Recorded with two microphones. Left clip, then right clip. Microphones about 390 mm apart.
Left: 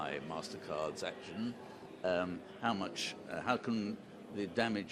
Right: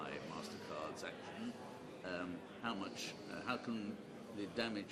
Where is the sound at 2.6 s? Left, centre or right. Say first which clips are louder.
Left 8 dB; left.